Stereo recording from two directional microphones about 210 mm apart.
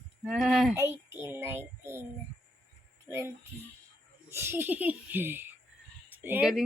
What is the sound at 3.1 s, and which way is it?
Speech, 15° right (ahead or behind).